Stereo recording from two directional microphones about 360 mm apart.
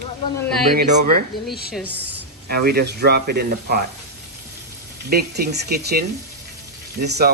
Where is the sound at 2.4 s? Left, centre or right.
Right.